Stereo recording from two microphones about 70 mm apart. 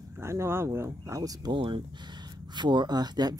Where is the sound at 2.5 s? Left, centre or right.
Right.